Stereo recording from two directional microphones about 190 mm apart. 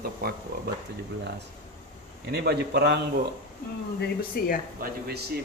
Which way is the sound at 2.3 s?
60° right (ahead or behind).